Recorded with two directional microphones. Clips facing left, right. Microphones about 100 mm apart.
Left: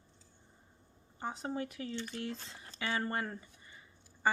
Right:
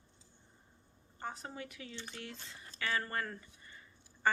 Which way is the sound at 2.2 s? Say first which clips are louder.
Left 7 dB; 35° left (ahead or behind).